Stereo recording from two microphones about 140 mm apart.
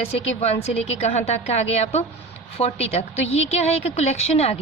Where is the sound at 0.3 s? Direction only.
50° left (ahead or behind).